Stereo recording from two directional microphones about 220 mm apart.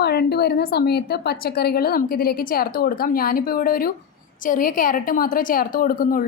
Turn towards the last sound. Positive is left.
turn(degrees=40)  # may be behind; listen again after turning